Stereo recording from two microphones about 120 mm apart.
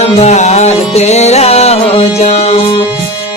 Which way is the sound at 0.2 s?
75° left (ahead or behind).